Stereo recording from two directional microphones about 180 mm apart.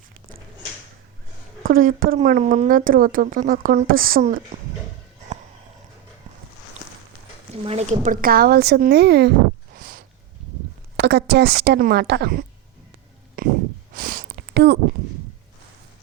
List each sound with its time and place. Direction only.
1.6 s speech: 55° right (ahead or behind)
2.1 s speech: 40° right (ahead or behind)
7.6 s speech: 35° right (ahead or behind); by 9.3 s 65° right (ahead or behind)
9.7 s a sound: 55° right (ahead or behind)
10.9 s speech: 65° right (ahead or behind)
13.4 s a sound: 50° right (ahead or behind)